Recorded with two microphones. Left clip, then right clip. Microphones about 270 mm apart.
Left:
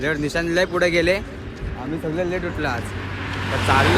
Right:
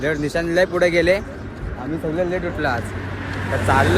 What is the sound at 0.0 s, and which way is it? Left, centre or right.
Speech, centre.